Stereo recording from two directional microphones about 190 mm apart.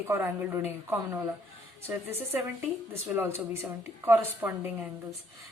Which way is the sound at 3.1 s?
10° right (ahead or behind).